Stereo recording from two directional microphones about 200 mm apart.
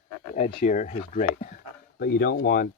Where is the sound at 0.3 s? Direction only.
40° left (ahead or behind).